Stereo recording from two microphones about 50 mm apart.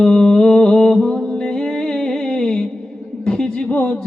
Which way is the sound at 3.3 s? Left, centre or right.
Centre.